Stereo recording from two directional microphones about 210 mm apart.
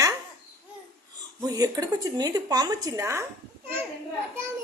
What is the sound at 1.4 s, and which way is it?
A woman's voice, 20° right (ahead or behind).